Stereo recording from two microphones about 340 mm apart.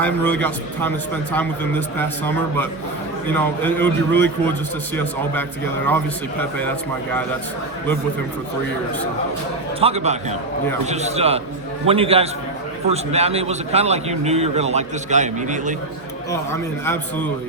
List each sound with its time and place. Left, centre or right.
0.0 s a man's voice: centre
9.8 s a man's voice: centre
16.8 s a man's voice: centre